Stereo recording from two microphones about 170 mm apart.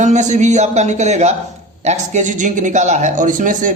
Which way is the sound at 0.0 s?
45° right (ahead or behind).